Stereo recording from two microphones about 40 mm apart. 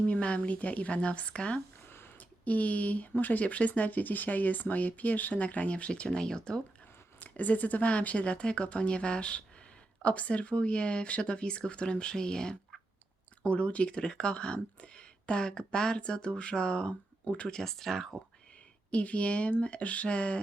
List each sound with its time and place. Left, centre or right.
0.0 s speech: left
2.4 s speech: left
3.4 s speech: left; by 6.6 s centre
7.3 s speech: left; by 12.5 s centre
13.4 s speech: left
17.5 s speech: centre
18.9 s speech: left